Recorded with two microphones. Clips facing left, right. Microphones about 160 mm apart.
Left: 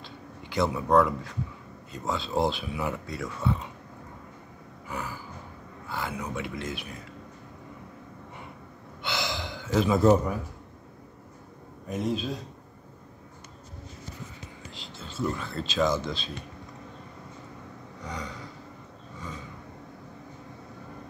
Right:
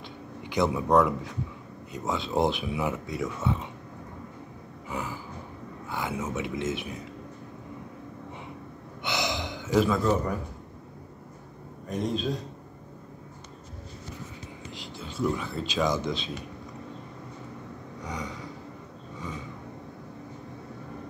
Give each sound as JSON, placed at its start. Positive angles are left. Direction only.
{"t": 0.5, "sound": "a man's voice", "side_deg": -15}
{"t": 4.8, "sound": "a sound", "side_deg": -20}
{"t": 5.9, "sound": "speech", "side_deg": -20}
{"t": 9.0, "sound": "gasp", "side_deg": -20}
{"t": 11.9, "sound": "a man's voice", "side_deg": 5}
{"t": 14.7, "sound": "speech", "side_deg": -15}
{"t": 18.0, "sound": "vehicle", "side_deg": -20}